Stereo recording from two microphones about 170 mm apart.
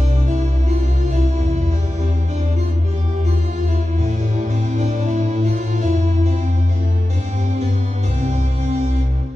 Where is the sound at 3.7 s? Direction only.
45° right (ahead or behind).